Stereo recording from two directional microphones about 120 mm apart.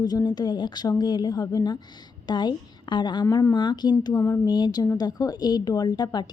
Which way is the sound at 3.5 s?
40° left (ahead or behind).